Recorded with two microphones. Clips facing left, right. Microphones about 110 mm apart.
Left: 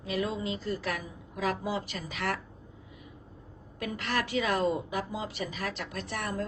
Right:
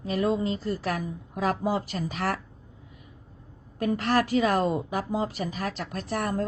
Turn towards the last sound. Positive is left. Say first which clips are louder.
# right 6 dB
turn(degrees=-40)  # may be behind; listen again after turning